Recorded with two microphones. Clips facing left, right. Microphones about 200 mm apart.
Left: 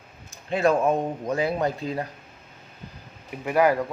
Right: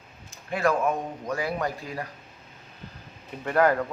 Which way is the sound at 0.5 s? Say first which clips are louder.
Left 4 dB; 25° left (ahead or behind).